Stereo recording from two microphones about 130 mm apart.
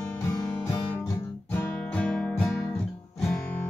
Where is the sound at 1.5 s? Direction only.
10° left (ahead or behind).